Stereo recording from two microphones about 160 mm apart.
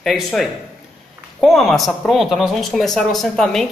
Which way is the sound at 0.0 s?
Centre (ahead or behind).